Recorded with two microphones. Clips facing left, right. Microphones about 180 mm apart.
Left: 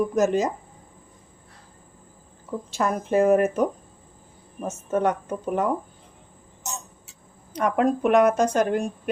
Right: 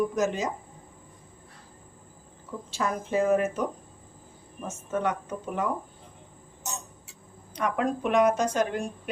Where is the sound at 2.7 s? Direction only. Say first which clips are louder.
Left 5 dB; 50° left (ahead or behind).